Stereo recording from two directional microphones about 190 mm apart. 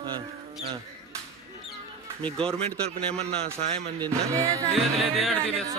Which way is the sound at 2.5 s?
30° right (ahead or behind).